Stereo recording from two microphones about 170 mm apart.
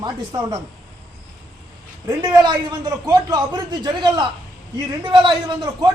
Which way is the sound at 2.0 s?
25° right (ahead or behind).